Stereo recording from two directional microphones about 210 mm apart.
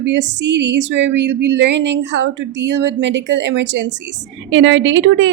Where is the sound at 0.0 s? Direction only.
60° right (ahead or behind).